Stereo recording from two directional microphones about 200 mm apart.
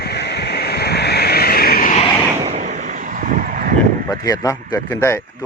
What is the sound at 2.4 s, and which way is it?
Vehicle, 35° right (ahead or behind).